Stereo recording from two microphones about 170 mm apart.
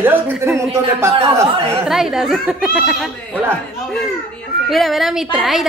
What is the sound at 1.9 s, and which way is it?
A woman's voice, centre (ahead or behind).